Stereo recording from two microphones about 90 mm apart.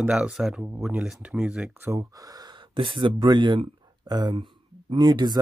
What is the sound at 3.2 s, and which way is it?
Speech, 55° right (ahead or behind).